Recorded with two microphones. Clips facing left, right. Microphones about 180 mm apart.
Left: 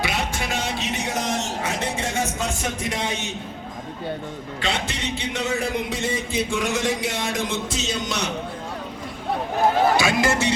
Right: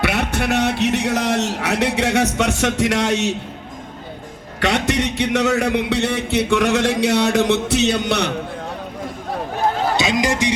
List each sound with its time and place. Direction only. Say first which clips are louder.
0.0 s a man's voice: right 6 dB; 60° right (ahead or behind)
4.6 s a man's voice: right 9 dB; 70° right (ahead or behind)
10.0 s music: right 2 dB; 20° right (ahead or behind)